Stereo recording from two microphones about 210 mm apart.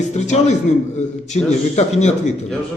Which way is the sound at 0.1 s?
35° left (ahead or behind).